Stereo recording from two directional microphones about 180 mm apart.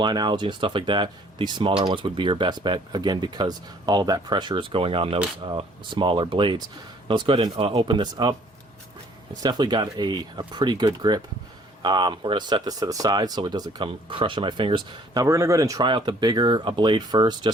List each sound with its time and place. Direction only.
0.0 s speech: 25° right (ahead or behind)